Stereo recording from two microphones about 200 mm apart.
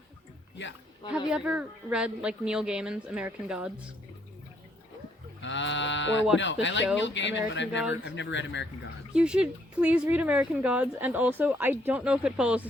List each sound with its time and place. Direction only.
1.3 s speech: 5° right (ahead or behind)
5.4 s speech: 65° left (ahead or behind)
9.1 s speech: 5° right (ahead or behind)